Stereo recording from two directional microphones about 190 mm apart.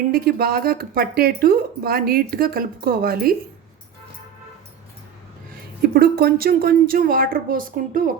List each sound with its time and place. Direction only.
0.1 s speech: 50° right (ahead or behind)
5.8 s speech: 55° right (ahead or behind)